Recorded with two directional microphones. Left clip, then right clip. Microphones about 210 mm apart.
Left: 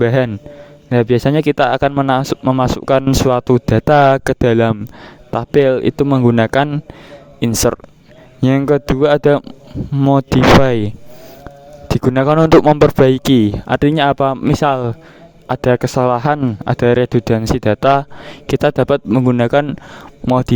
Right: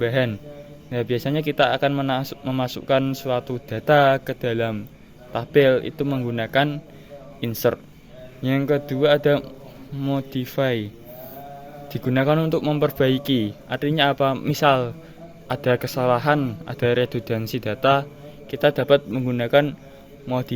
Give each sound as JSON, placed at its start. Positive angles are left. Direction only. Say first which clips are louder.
{"t": 0.0, "sound": "speech", "louder": "left 8 dB", "side_deg": 45}